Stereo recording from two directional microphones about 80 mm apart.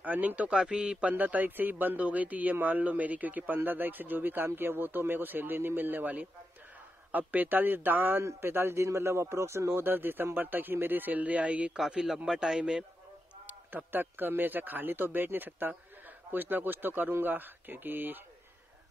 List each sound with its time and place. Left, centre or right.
0.0 s a man's voice: right
13.5 s a man's voice: right